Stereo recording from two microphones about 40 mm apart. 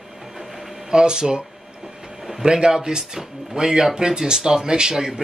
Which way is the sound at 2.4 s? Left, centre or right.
Right.